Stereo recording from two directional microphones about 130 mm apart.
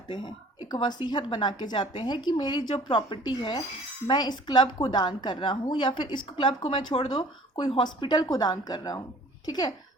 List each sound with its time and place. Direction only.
0.1 s a woman's voice: 35° left (ahead or behind)